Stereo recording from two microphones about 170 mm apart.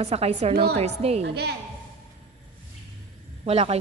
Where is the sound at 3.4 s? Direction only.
35° right (ahead or behind).